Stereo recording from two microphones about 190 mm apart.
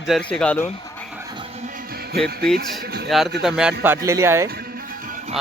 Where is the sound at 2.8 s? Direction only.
55° right (ahead or behind).